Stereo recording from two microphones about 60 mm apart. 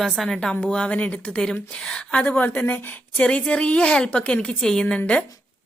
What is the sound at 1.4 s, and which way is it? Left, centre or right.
Speech, centre.